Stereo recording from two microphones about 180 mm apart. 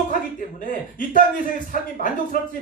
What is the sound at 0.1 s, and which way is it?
Speech, 50° left (ahead or behind).